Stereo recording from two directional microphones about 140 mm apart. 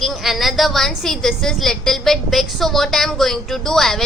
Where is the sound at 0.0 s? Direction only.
Centre (ahead or behind).